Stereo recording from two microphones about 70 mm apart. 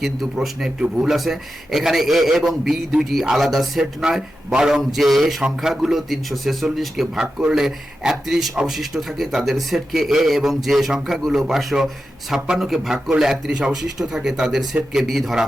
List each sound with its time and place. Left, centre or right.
0.4 s a man's voice: centre